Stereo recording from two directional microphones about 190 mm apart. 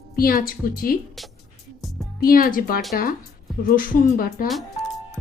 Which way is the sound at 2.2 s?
50° left (ahead or behind).